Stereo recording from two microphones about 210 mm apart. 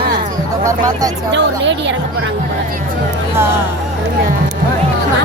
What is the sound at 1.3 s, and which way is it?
Speech, 55° right (ahead or behind).